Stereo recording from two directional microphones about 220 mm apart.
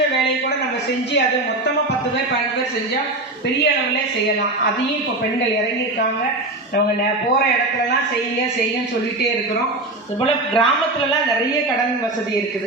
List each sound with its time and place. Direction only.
10.2 s speech: 20° left (ahead or behind)